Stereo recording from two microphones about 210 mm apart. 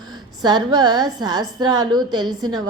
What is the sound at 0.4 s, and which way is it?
A woman's voice, 20° right (ahead or behind).